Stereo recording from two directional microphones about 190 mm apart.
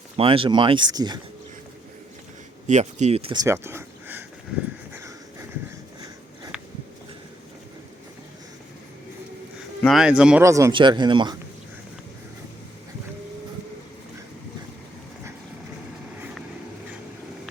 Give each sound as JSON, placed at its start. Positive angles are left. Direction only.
{"t": 0.2, "sound": "speech", "side_deg": -25}
{"t": 2.6, "sound": "speech", "side_deg": -40}
{"t": 3.4, "sound": "a sound", "side_deg": -15}
{"t": 9.8, "sound": "speech", "side_deg": 0}
{"t": 10.4, "sound": "speech", "side_deg": -15}